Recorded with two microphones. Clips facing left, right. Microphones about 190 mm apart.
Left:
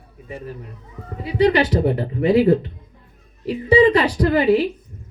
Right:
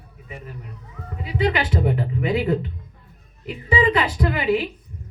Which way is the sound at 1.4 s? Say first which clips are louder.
Left 6 dB; 40° left (ahead or behind).